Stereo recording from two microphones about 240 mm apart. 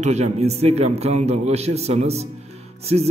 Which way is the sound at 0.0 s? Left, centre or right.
Right.